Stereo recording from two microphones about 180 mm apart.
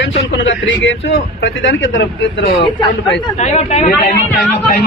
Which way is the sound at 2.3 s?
30° left (ahead or behind).